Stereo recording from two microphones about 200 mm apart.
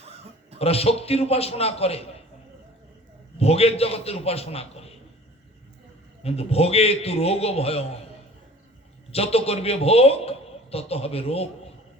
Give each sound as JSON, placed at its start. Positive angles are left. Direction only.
{"t": 0.6, "sound": "a man's voice", "side_deg": 30}
{"t": 3.3, "sound": "a man's voice", "side_deg": 30}
{"t": 6.2, "sound": "a man's voice", "side_deg": 30}
{"t": 9.1, "sound": "a man's voice", "side_deg": 30}